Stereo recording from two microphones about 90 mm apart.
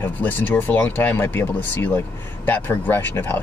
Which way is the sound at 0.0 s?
20° left (ahead or behind).